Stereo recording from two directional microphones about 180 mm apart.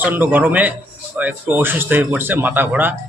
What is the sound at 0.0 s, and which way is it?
Speech, 10° right (ahead or behind).